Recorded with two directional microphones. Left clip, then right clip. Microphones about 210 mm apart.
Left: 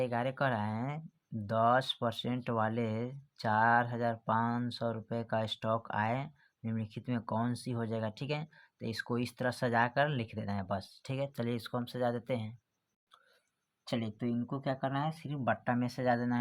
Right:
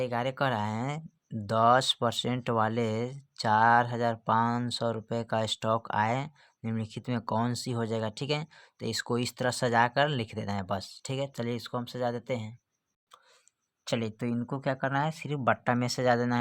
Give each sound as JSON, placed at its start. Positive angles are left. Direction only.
{"t": 0.0, "sound": "speech", "side_deg": -20}
{"t": 13.8, "sound": "speech", "side_deg": -45}